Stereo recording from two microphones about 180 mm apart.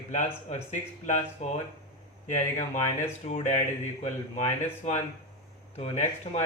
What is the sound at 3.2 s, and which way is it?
Speech, 40° left (ahead or behind).